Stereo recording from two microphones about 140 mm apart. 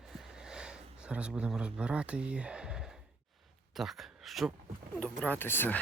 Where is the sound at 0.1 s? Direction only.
5° right (ahead or behind).